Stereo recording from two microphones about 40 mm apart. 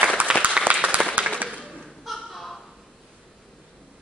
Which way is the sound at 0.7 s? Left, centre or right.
Right.